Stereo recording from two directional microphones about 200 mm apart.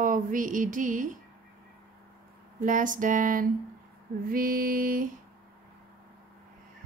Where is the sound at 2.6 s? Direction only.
40° right (ahead or behind).